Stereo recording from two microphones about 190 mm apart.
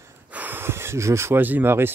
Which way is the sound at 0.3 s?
10° right (ahead or behind).